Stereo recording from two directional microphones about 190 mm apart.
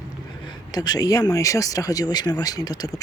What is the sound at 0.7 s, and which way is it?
Speech, 20° left (ahead or behind).